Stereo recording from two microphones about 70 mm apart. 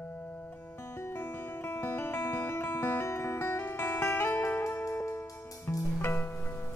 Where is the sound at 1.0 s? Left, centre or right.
Left.